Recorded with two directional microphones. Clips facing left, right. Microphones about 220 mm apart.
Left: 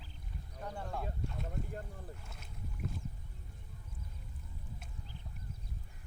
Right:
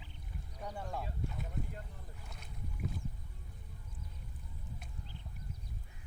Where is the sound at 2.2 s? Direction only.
Centre (ahead or behind).